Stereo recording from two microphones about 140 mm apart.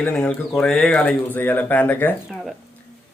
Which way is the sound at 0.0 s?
10° left (ahead or behind).